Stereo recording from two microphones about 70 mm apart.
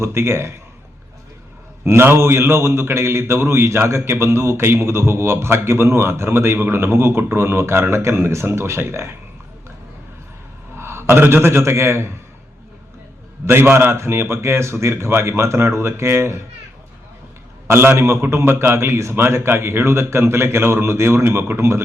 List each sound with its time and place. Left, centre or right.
0.0 s a man's voice: right
1.8 s a man's voice: right
10.8 s a man's voice: right
13.4 s a man's voice: right
17.7 s a man's voice: right